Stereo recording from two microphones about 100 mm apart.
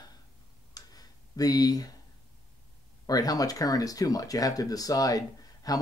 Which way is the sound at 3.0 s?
40° left (ahead or behind).